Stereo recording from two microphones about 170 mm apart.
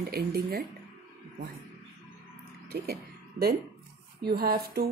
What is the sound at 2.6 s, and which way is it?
Speech, 65° right (ahead or behind).